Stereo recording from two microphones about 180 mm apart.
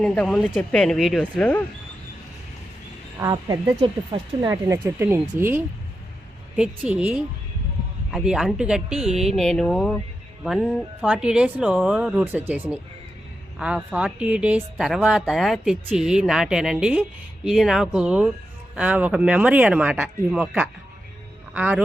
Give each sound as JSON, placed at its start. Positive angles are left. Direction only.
{"t": 0.0, "sound": "speech", "side_deg": 5}
{"t": 3.2, "sound": "speech", "side_deg": -20}